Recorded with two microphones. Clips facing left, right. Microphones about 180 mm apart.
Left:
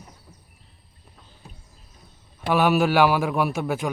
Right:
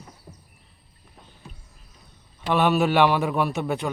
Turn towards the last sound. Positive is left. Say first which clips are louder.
# left 1 dB
turn(degrees=0)  # may be behind; listen again after turning